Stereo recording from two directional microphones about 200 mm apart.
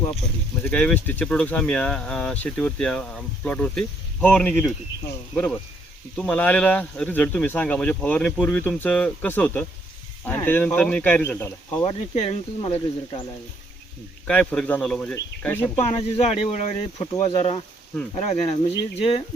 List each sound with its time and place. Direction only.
0.6 s speech: 5° left (ahead or behind)
11.8 s speech: 30° left (ahead or behind)
14.3 s speech: 5° left (ahead or behind)
15.8 s speech: 30° left (ahead or behind)